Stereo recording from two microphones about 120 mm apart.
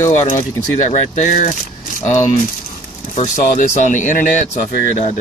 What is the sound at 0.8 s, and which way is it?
Speech, 75° left (ahead or behind).